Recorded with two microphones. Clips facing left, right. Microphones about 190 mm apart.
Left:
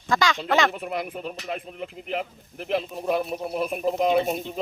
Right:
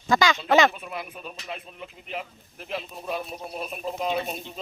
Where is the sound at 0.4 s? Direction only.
Centre (ahead or behind).